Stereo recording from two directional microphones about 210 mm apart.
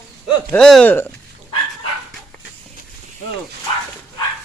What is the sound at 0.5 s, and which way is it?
Speech, 5° left (ahead or behind).